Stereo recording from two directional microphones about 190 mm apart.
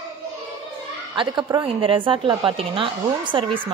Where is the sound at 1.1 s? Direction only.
25° right (ahead or behind).